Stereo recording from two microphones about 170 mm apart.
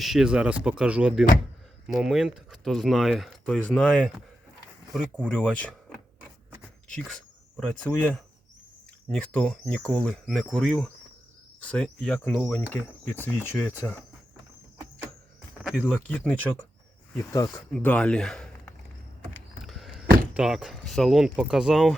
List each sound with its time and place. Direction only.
0.0 s speech: 5° right (ahead or behind)
6.9 s speech: centre (ahead or behind)
15.8 s speech: 10° left (ahead or behind)
17.7 s speech: 5° left (ahead or behind)